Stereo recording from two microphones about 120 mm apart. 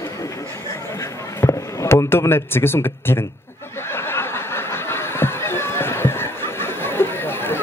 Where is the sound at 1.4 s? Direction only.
25° left (ahead or behind).